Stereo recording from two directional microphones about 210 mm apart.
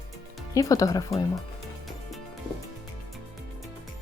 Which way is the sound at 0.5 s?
15° left (ahead or behind).